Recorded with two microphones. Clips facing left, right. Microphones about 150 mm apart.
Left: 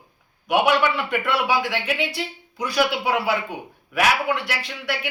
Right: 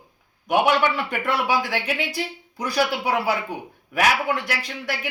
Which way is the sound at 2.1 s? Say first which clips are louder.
Even; 40° right (ahead or behind).